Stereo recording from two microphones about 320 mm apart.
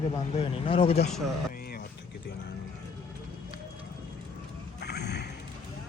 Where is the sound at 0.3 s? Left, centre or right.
Centre.